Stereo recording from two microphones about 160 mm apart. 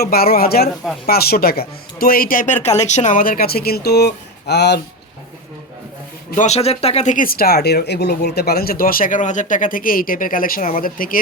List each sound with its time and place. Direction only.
0.0 s speech: 70° left (ahead or behind); by 4.8 s 90° left
6.3 s speech: 45° left (ahead or behind); by 11.2 s 60° left (ahead or behind)